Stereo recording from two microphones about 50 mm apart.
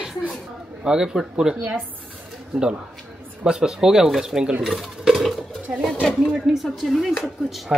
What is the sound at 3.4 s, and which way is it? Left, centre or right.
A man's voice, centre.